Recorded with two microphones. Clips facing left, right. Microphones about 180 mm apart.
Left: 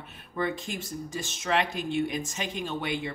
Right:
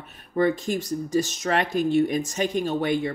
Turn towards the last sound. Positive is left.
turn(degrees=-45)  # may be behind; listen again after turning